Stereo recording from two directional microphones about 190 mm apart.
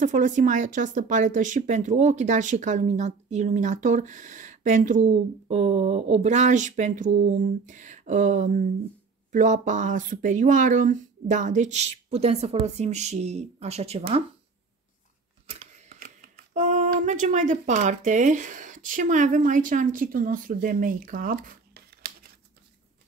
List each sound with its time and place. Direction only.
0.0 s speech: 40° right (ahead or behind)
16.0 s speech: 45° right (ahead or behind)